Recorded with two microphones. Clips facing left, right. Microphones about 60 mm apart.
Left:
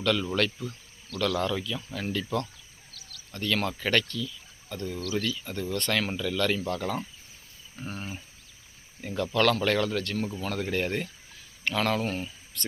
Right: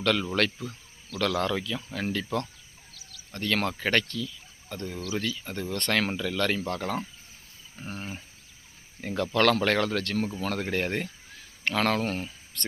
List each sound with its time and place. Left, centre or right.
0.0 s speech: right
7.8 s speech: centre
9.0 s speech: right
10.4 s speech: right